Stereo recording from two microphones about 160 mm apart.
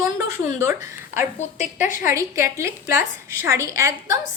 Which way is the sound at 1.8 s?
55° left (ahead or behind).